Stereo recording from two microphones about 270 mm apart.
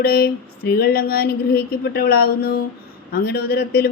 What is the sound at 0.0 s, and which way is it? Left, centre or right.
Speech, left.